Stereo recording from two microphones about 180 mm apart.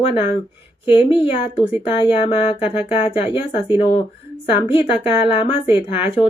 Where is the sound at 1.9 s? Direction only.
30° left (ahead or behind).